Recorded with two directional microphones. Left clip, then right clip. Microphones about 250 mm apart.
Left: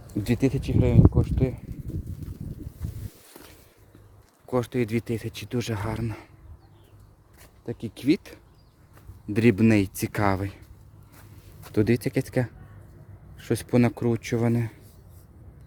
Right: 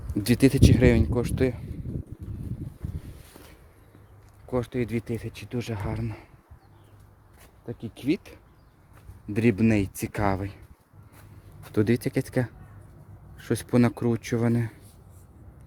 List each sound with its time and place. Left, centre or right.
0.1 s speech: centre
3.3 s walk: left
4.4 s speech: centre
7.6 s speech: left
11.6 s speech: centre